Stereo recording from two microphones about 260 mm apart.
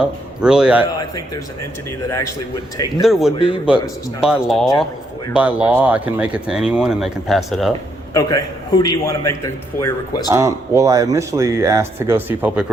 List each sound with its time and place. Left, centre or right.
0.0 s speech: centre
2.0 s a man's voice: centre
3.0 s speech: centre
3.3 s speech: centre
4.2 s speech: centre
8.1 s a man's voice: centre
10.2 s speech: centre